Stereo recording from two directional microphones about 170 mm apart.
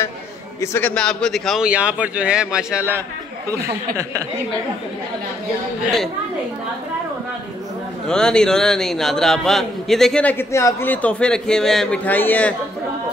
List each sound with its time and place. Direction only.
0.6 s a man's voice: 10° left (ahead or behind); by 4.2 s 15° right (ahead or behind)
8.1 s a man's voice: 5° left (ahead or behind)